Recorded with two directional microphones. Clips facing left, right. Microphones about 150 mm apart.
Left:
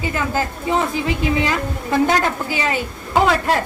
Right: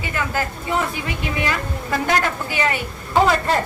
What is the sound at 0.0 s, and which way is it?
Speech, 25° left (ahead or behind).